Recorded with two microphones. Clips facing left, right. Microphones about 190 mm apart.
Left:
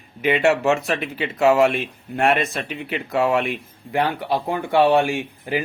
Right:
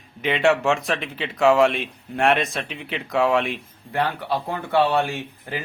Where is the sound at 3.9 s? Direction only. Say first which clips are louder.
Left 3 dB; 15° left (ahead or behind).